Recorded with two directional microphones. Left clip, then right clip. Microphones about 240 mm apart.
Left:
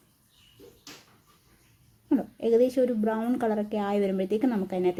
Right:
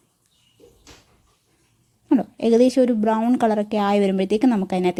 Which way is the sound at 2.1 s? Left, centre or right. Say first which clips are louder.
Right 6 dB; right.